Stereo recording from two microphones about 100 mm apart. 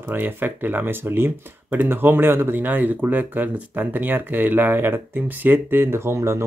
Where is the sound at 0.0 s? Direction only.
20° right (ahead or behind).